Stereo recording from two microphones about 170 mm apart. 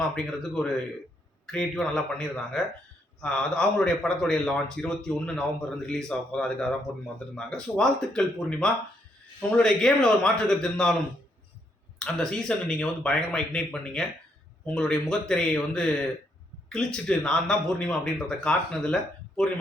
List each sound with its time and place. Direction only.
0.4 s speech: 5° left (ahead or behind)
11.9 s speech: 5° left (ahead or behind)